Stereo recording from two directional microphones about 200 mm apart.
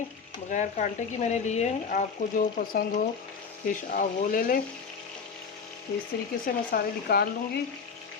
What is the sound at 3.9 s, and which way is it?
Speech, 45° left (ahead or behind).